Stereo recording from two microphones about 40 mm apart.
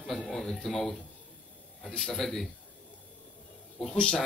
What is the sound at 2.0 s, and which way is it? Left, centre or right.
Speech, centre.